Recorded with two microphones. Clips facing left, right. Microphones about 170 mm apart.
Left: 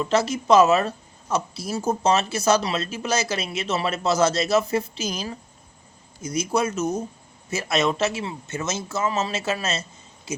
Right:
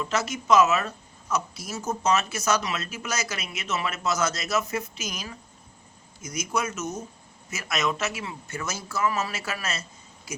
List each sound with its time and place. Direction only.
0.0 s speech: 30° left (ahead or behind)